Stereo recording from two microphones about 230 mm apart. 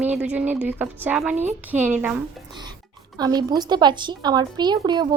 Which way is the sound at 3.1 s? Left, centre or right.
Centre.